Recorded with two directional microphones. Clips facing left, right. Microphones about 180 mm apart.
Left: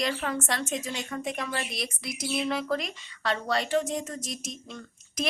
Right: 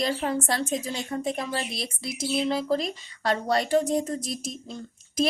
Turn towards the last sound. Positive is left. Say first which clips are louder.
# right 6 dB
turn(degrees=-30)  # may be behind; listen again after turning